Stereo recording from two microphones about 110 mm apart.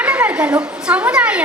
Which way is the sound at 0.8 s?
10° right (ahead or behind).